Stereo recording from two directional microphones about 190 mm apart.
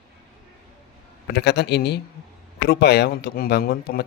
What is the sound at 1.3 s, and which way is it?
Speech, 60° left (ahead or behind).